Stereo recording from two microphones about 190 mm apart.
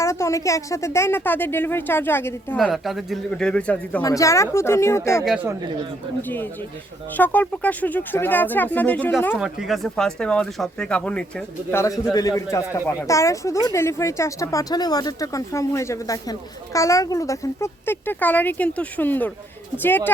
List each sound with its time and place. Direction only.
0.0 s speech: 15° left (ahead or behind)
2.6 s speech: centre (ahead or behind)
5.2 s speech: 5° right (ahead or behind)
6.2 s speech: 10° left (ahead or behind)
9.4 s speech: centre (ahead or behind)